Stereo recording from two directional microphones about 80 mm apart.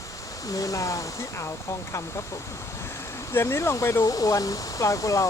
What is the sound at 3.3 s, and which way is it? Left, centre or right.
Speech, left.